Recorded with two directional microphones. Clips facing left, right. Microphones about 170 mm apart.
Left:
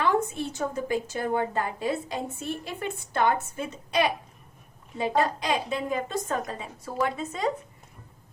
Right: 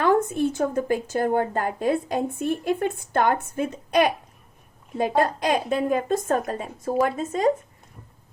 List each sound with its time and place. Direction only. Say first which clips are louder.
0.0 s a woman's voice: right 5 dB; 50° right (ahead or behind)